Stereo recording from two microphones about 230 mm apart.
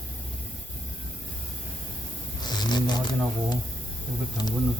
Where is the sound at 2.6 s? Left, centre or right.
Centre.